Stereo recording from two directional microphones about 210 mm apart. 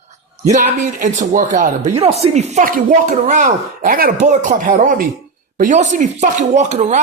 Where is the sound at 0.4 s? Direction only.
35° right (ahead or behind).